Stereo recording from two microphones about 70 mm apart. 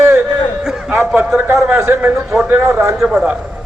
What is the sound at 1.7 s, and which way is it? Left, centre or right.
Speech, right.